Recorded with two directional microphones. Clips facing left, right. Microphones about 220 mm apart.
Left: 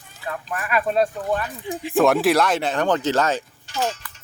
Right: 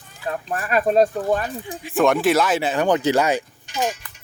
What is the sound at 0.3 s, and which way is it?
Speech, 30° right (ahead or behind).